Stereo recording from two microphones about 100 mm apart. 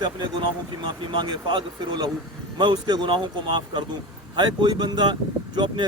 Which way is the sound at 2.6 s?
45° right (ahead or behind).